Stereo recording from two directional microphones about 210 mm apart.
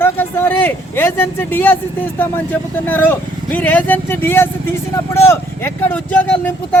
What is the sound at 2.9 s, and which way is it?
Speech, 10° left (ahead or behind).